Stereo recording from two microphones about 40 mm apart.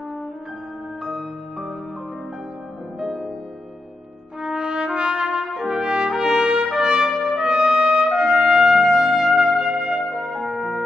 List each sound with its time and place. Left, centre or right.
3.0 s music: centre
4.6 s music: right
5.3 s brass instrument: centre
7.3 s trumpet: centre
8.2 s trumpet: centre
9.6 s music: centre
10.3 s music: centre